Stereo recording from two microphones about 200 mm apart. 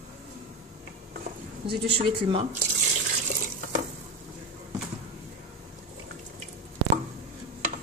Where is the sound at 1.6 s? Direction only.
25° right (ahead or behind).